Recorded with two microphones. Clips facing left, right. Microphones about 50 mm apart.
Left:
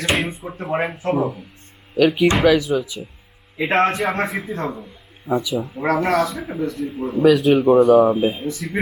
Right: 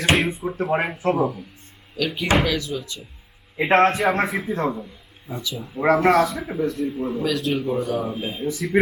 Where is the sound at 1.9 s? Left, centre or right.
Centre.